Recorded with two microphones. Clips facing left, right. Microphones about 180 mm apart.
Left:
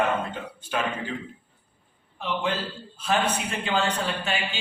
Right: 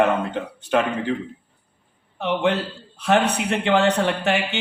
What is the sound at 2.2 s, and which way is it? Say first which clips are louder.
A man's voice: right 7 dB; 65° right (ahead or behind).